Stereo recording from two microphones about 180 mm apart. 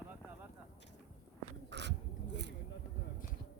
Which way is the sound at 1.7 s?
75° right (ahead or behind).